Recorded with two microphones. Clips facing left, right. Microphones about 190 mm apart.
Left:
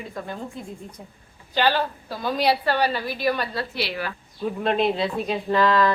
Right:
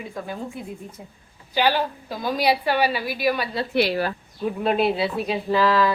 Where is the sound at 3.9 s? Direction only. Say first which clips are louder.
Right 6 dB; 35° right (ahead or behind).